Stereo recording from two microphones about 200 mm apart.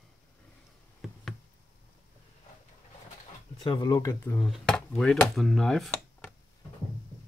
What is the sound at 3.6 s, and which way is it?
Speech, 25° left (ahead or behind).